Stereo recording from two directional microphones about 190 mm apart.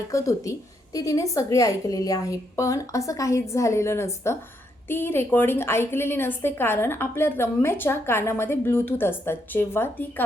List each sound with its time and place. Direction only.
0.1 s a woman's voice: 15° left (ahead or behind)